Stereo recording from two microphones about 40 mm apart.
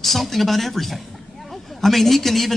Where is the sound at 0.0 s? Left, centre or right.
Centre.